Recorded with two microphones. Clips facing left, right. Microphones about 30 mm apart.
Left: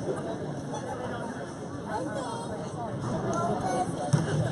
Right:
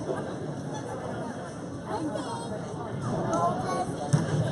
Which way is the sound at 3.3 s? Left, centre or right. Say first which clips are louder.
Right 3 dB; centre.